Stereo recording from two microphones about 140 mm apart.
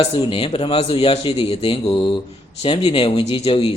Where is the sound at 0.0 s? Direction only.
40° left (ahead or behind).